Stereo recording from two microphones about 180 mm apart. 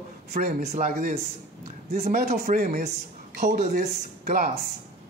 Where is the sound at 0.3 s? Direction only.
50° right (ahead or behind).